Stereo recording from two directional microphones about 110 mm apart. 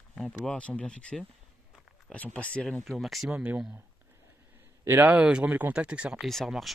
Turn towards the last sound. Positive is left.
turn(degrees=0)  # may be behind; listen again after turning